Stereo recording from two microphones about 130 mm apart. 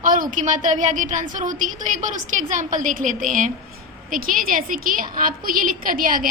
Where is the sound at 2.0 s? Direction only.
75° right (ahead or behind).